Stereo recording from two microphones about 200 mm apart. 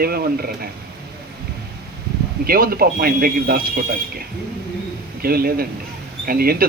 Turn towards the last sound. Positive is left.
turn(degrees=-50)  # may be behind; listen again after turning